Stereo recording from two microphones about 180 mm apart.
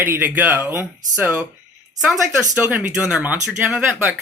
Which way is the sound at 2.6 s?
5° right (ahead or behind).